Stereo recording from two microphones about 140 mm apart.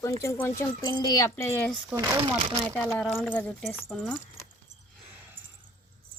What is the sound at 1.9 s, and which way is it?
Speech, 20° right (ahead or behind).